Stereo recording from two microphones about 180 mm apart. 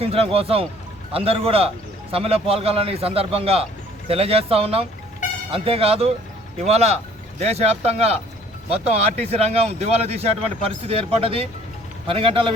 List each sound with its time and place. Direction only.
0.0 s a man's voice: 35° right (ahead or behind)